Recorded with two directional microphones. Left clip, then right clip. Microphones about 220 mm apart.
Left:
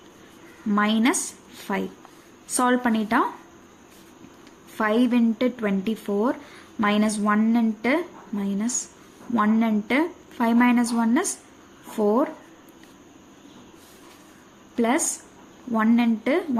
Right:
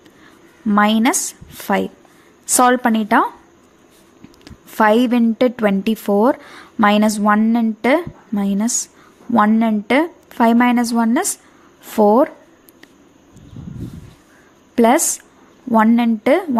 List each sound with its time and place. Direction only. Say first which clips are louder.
0.7 s a woman's voice: right 7 dB; 35° right (ahead or behind)
2.6 s a woman's voice: right 8 dB; 35° right (ahead or behind)
4.4 s a woman's voice: right 11 dB; 40° right (ahead or behind)
14.8 s a woman's voice: right 10 dB; 35° right (ahead or behind)